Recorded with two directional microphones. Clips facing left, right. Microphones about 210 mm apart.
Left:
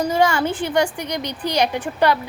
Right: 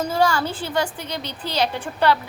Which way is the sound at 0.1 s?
20° left (ahead or behind).